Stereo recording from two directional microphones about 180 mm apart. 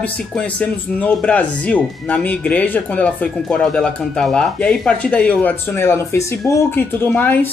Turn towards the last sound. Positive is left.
turn(degrees=10)  # may be behind; listen again after turning